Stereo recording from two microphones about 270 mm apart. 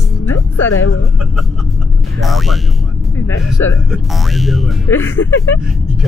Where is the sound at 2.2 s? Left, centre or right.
Centre.